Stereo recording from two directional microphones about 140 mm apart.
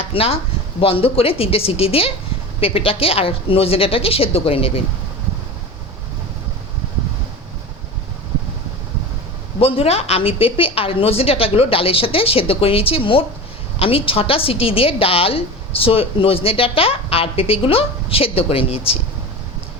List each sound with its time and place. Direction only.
0.0 s a woman's voice: 45° left (ahead or behind)
9.6 s a woman's voice: 45° left (ahead or behind)